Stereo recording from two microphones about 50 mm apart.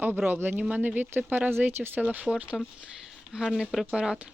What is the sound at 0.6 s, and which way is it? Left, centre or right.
Speech, right.